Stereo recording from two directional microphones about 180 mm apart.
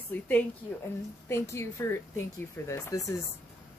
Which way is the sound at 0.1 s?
10° left (ahead or behind).